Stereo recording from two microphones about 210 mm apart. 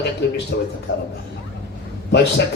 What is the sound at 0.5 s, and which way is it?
Speech, 50° left (ahead or behind).